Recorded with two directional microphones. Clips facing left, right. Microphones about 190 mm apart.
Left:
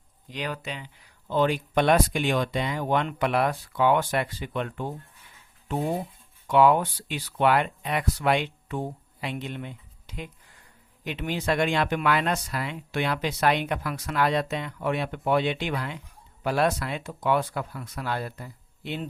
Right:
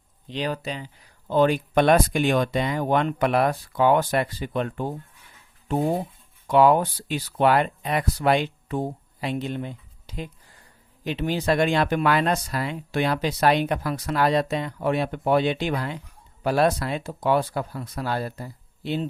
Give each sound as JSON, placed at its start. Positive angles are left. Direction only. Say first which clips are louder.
{"t": 0.3, "sound": "speech", "louder": "right 5 dB", "side_deg": -30}
{"t": 6.5, "sound": "speech", "louder": "right 2 dB", "side_deg": -40}